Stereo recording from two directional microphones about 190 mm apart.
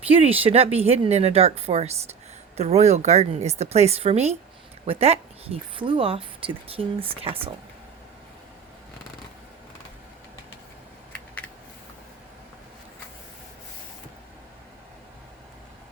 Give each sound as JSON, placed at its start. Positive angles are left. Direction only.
{"t": 0.1, "sound": "a woman's voice", "side_deg": -30}